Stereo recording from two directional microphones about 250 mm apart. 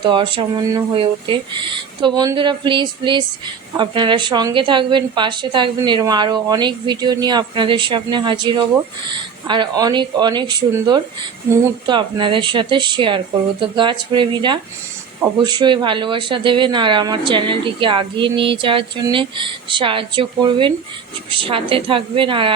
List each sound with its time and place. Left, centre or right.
0.0 s a woman's voice: centre